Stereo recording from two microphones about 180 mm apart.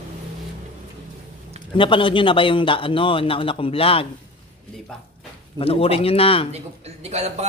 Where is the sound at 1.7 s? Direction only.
30° left (ahead or behind).